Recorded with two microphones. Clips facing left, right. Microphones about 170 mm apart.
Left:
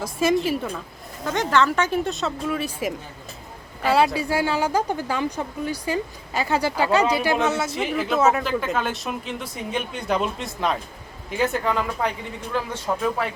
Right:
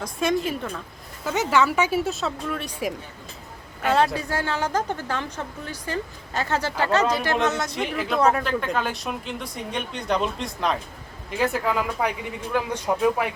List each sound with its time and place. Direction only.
0.0 s speech: 5° left (ahead or behind)
1.2 s a woman's voice: 5° right (ahead or behind)